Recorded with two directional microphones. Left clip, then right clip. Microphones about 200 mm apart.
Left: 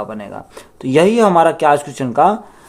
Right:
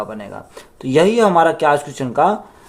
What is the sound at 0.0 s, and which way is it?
Speech, 25° left (ahead or behind).